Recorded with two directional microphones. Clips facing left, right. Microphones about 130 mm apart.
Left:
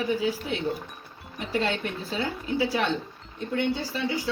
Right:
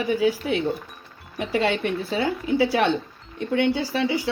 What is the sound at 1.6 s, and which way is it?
A woman's voice, 75° right (ahead or behind).